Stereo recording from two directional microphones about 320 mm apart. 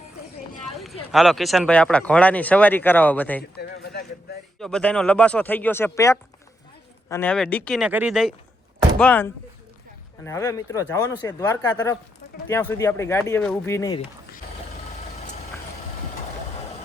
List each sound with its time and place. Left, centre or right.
1.1 s speech: centre
3.5 s a sound: left
4.6 s speech: centre